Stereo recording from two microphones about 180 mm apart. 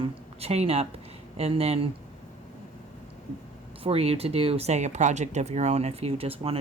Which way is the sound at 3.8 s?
35° right (ahead or behind).